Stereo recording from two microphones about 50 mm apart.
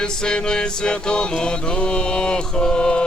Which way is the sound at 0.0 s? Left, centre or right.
Centre.